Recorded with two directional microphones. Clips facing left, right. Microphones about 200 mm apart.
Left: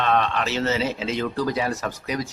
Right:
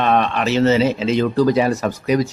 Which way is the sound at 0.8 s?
80° right.